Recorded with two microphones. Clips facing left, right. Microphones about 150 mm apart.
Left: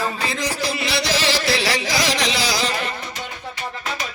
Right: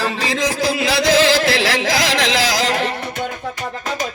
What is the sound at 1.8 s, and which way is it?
Music, 90° right.